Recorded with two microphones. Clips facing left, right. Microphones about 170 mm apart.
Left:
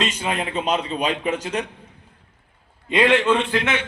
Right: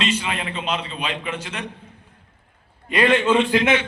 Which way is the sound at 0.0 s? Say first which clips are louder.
Even; 45° left (ahead or behind).